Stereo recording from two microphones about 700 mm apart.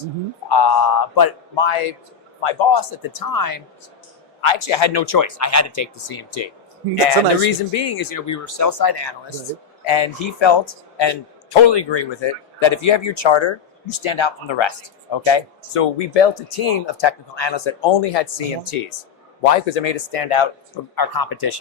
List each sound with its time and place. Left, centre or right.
0.4 s a man's voice: left
3.1 s a woman's voice: left
4.4 s speech: left
20.9 s speech: left